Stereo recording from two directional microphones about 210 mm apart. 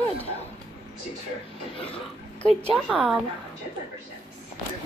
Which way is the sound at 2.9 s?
Centre (ahead or behind).